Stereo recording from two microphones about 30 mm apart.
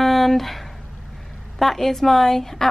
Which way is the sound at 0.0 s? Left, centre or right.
Centre.